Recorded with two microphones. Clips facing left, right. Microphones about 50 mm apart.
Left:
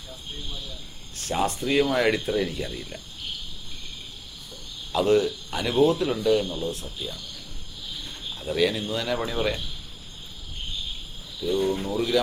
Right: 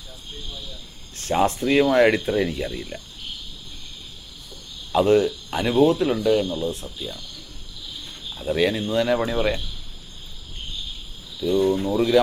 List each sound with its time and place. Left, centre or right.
1.3 s speech: right
4.9 s a man's voice: centre
8.4 s a man's voice: centre
11.4 s a man's voice: centre